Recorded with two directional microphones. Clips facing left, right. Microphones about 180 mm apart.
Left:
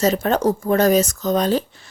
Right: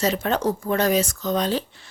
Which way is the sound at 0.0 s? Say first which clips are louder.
Left 4 dB; 40° left (ahead or behind).